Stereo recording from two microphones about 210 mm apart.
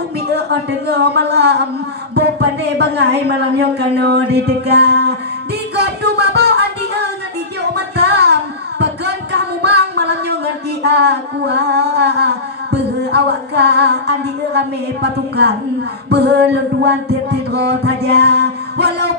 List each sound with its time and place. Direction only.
0.3 s speech: 55° right (ahead or behind)
5.8 s music: 50° right (ahead or behind)
16.1 s speech: 55° right (ahead or behind)